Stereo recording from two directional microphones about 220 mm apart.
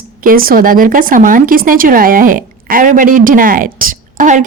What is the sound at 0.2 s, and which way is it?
Speech, 40° right (ahead or behind).